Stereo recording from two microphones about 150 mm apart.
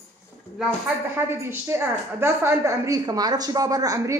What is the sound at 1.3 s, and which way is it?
A woman's voice, 15° right (ahead or behind).